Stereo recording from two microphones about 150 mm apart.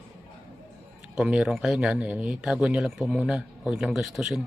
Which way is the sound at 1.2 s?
5° right (ahead or behind).